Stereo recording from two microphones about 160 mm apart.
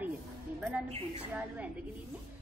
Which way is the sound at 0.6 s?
10° right (ahead or behind).